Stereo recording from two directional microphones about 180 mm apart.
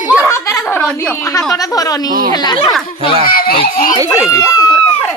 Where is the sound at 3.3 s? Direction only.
55° left (ahead or behind).